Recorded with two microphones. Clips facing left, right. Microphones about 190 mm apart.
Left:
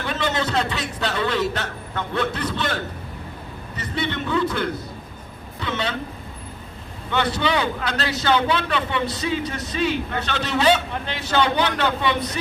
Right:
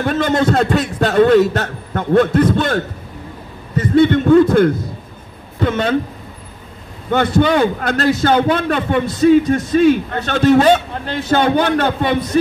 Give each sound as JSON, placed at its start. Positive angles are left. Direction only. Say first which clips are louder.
{"t": 0.0, "sound": "a man's voice", "louder": "right 9 dB", "side_deg": -50}
{"t": 7.1, "sound": "a man's voice", "louder": "right 8 dB", "side_deg": -50}